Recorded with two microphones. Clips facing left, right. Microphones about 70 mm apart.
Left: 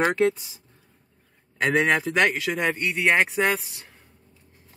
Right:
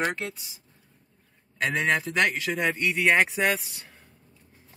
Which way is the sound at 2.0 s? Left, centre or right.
Left.